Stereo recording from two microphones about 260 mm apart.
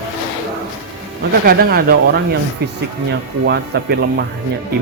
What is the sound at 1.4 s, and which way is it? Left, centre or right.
Speech, right.